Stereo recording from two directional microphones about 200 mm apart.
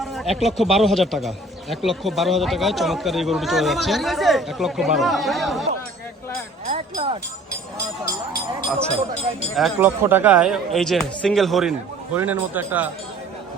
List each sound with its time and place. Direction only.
0.0 s speech: centre (ahead or behind)
6.9 s speech: 25° right (ahead or behind)
9.6 s speech: centre (ahead or behind)